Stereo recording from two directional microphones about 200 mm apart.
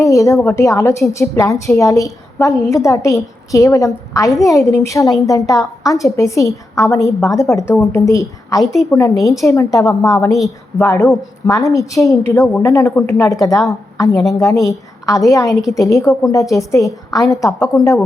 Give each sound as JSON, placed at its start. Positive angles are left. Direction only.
{"t": 0.0, "sound": "a woman's voice", "side_deg": 15}
{"t": 8.6, "sound": "a woman's voice", "side_deg": 0}
{"t": 8.9, "sound": "a woman's voice", "side_deg": 15}